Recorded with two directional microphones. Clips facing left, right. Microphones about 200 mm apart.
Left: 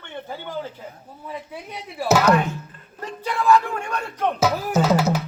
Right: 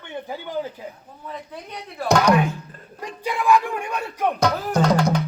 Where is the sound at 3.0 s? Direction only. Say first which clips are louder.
Even; 15° right (ahead or behind).